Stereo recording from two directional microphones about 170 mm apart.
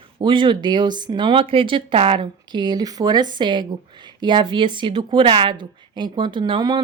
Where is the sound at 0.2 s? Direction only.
25° right (ahead or behind).